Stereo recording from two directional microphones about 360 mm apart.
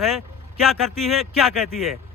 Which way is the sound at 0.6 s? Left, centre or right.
Centre.